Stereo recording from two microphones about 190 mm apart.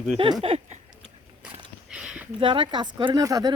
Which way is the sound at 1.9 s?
5° right (ahead or behind).